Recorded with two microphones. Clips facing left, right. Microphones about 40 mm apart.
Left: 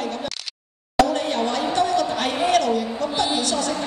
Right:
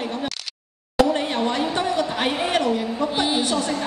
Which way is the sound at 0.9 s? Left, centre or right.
Right.